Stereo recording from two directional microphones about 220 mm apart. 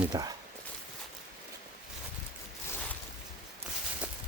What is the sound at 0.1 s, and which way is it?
Speech, 20° right (ahead or behind).